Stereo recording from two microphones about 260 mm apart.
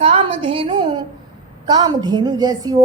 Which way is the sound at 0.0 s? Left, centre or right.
Right.